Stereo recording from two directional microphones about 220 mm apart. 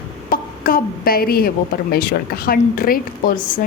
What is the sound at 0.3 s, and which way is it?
A woman's voice, 40° left (ahead or behind).